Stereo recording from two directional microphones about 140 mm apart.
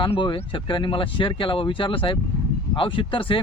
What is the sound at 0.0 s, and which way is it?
Speech, 35° left (ahead or behind).